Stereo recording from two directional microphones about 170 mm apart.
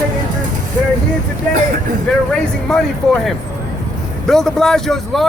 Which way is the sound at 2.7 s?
Centre (ahead or behind).